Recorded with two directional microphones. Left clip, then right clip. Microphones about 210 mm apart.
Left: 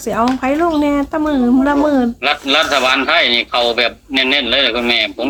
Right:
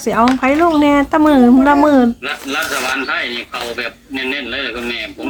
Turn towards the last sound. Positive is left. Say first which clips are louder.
# left 8 dB
turn(degrees=50)  # may be behind; listen again after turning